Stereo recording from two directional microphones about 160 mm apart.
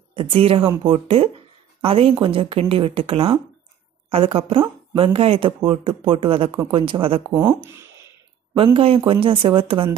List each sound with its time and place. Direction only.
0.1 s a woman's voice: 35° right (ahead or behind)
7.3 s speech: 15° right (ahead or behind)
8.5 s a woman's voice: 35° right (ahead or behind)